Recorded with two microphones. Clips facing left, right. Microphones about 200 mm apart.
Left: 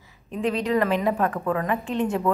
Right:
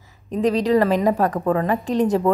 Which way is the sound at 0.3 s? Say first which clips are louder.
Right 6 dB; 40° right (ahead or behind).